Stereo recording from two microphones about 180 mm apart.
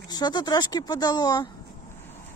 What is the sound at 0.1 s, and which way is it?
Speech, 25° left (ahead or behind).